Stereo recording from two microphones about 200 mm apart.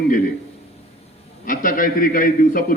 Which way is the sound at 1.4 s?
45° left (ahead or behind).